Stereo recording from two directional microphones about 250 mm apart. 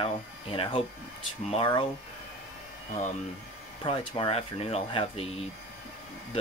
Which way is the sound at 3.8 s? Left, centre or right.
Left.